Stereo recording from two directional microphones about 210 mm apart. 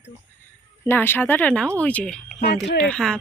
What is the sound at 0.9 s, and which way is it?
Speech, 10° left (ahead or behind).